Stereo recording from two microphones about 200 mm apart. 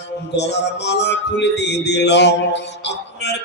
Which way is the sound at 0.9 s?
60° left (ahead or behind).